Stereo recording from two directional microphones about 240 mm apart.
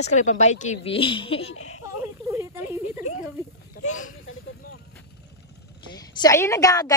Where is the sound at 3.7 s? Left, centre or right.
Left.